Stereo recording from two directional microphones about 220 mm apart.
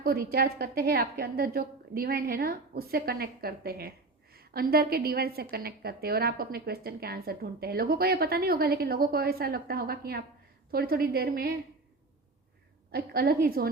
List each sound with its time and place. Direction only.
0.0 s a woman's voice: 45° right (ahead or behind)
12.9 s a woman's voice: 45° right (ahead or behind)